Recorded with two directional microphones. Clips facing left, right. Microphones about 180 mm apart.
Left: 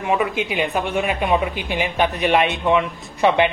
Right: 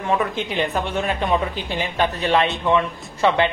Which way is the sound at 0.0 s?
10° left (ahead or behind).